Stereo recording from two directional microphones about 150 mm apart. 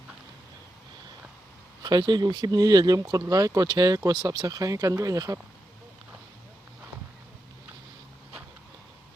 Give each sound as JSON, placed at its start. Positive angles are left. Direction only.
{"t": 1.8, "sound": "speech", "side_deg": -30}